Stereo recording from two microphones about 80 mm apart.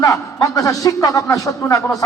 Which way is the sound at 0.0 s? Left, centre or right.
Left.